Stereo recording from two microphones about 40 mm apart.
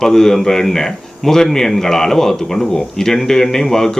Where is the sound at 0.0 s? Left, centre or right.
Centre.